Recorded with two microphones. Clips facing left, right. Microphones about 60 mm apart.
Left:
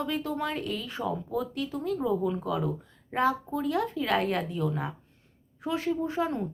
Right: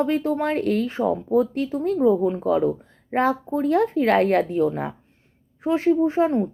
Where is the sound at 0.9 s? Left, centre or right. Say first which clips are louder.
Right 10 dB; right.